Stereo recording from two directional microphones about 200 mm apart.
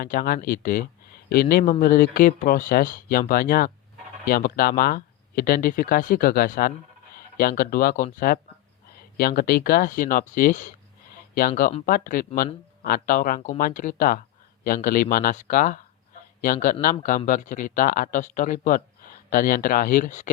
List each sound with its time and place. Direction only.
0.0 s speech: 45° left (ahead or behind)